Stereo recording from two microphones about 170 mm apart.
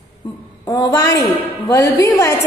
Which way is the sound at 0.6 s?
20° left (ahead or behind).